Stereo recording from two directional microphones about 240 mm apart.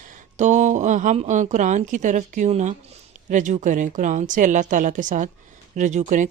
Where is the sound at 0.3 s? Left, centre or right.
Right.